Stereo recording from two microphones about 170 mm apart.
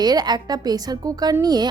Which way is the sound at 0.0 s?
25° right (ahead or behind).